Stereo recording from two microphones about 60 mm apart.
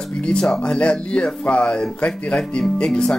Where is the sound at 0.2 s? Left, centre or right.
Centre.